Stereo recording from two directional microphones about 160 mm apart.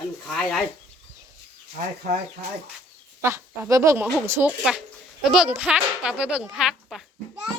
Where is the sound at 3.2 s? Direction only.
15° right (ahead or behind).